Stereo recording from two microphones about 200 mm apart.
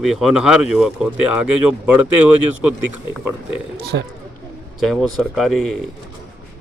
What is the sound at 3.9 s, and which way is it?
Speech, 60° right (ahead or behind).